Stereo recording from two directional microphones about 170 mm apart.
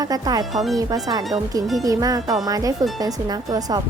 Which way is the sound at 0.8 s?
20° right (ahead or behind).